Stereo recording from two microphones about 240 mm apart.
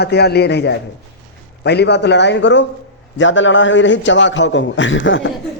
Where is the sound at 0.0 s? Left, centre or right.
Left.